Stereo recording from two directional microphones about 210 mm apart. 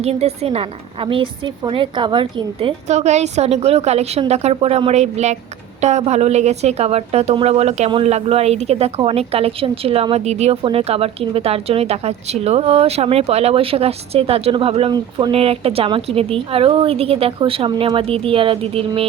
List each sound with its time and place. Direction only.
0.0 s a woman's voice: 30° right (ahead or behind)